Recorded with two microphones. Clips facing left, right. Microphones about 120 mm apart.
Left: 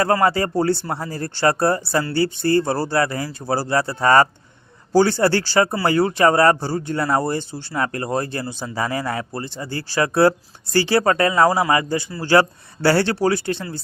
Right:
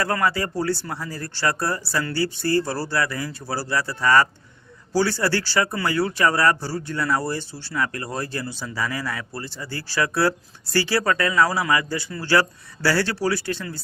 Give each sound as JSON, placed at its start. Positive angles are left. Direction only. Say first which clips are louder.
{"t": 0.0, "sound": "speech", "louder": "left 5 dB", "side_deg": 30}
{"t": 3.4, "sound": "speech", "louder": "left 9 dB", "side_deg": 50}
{"t": 3.7, "sound": "speech", "louder": "left 3 dB", "side_deg": 30}
{"t": 7.7, "sound": "a man's voice", "louder": "left 4 dB", "side_deg": 35}
{"t": 9.3, "sound": "a man's voice", "louder": "left 5 dB", "side_deg": 20}